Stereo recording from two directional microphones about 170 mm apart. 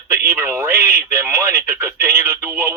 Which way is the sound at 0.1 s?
15° right (ahead or behind).